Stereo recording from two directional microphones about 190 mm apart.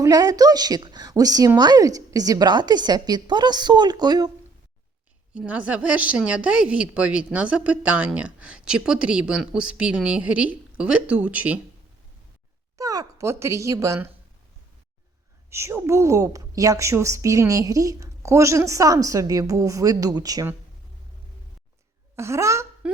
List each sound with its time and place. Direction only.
0.0 s a woman's voice: 20° right (ahead or behind)
5.3 s a woman's voice: 5° right (ahead or behind)
12.7 s speech: 20° right (ahead or behind)
15.4 s a woman's voice: 15° right (ahead or behind)
22.1 s a woman's voice: 15° right (ahead or behind)